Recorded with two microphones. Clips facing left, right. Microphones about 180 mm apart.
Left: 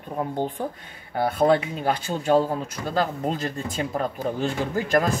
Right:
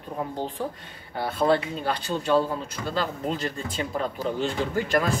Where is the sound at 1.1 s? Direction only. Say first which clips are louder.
Left 3 dB; 50° left (ahead or behind).